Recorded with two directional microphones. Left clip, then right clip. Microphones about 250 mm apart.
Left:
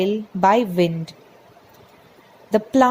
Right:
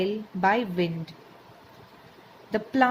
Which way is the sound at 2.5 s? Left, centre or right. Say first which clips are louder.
Left 7 dB; left.